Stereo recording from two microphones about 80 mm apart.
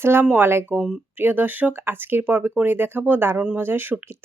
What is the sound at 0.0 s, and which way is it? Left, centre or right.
Speech, right.